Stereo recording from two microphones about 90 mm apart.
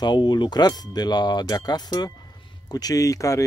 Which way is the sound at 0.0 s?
55° left (ahead or behind).